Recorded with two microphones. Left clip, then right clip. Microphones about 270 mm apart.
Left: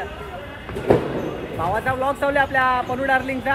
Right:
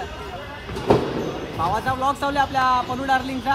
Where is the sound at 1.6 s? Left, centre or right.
Centre.